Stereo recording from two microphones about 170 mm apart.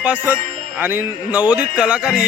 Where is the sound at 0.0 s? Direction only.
10° right (ahead or behind).